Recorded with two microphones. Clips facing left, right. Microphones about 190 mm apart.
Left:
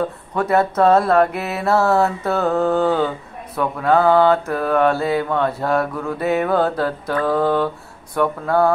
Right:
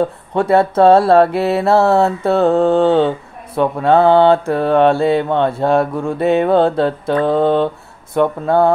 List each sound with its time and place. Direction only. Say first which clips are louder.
0.3 s mantra: right 4 dB; 30° right (ahead or behind)